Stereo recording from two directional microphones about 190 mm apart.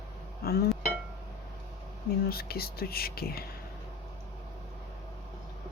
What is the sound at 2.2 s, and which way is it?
Speech, 55° left (ahead or behind).